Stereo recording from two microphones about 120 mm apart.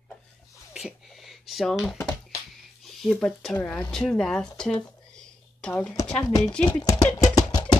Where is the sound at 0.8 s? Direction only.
Centre (ahead or behind).